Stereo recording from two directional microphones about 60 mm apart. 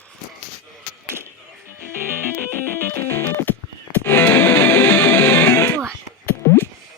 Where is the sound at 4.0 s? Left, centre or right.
Left.